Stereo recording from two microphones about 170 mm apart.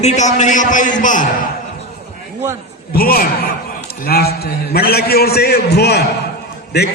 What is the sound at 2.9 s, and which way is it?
A man's voice, 60° left (ahead or behind).